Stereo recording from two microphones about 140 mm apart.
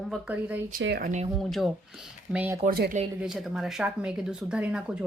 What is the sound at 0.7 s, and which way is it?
Speech, 90° right.